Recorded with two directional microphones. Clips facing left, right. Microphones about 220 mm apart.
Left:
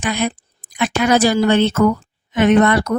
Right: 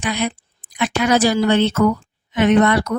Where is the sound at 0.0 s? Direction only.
50° left (ahead or behind).